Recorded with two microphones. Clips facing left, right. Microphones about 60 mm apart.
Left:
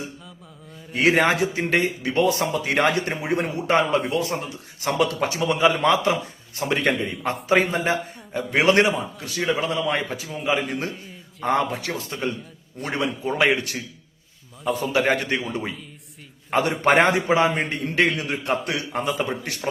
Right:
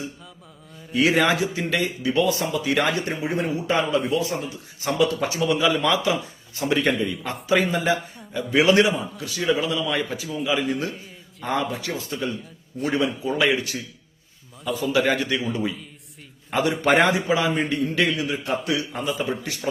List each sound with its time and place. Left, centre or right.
0.9 s a man's voice: left
10.2 s speech: left
11.4 s speech: left
14.9 s a man's voice: left
16.5 s speech: left